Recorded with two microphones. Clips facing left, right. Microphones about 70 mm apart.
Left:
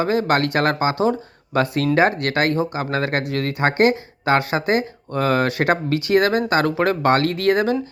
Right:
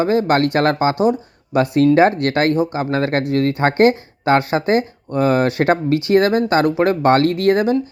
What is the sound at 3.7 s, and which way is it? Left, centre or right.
Speech, left.